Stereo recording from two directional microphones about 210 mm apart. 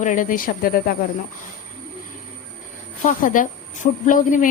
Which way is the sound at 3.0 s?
40° left (ahead or behind).